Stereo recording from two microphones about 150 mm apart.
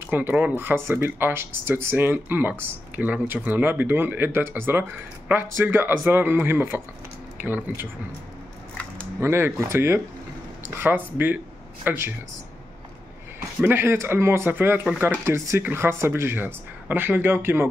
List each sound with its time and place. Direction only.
0.0 s speech: 15° right (ahead or behind)
9.2 s speech: 15° right (ahead or behind)
13.6 s speech: 15° right (ahead or behind)